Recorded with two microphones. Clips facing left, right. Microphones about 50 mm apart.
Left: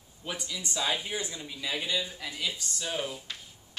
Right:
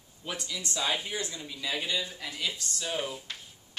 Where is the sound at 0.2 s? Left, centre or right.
Centre.